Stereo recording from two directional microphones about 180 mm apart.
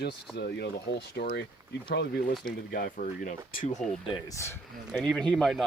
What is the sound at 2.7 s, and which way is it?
Speech, 55° left (ahead or behind).